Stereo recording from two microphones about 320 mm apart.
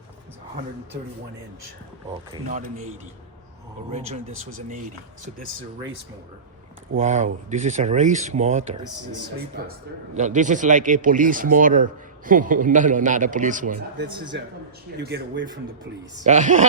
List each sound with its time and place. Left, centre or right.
2.3 s speech: right
3.9 s speech: centre
6.9 s speech: right
10.2 s speech: right
15.0 s speech: right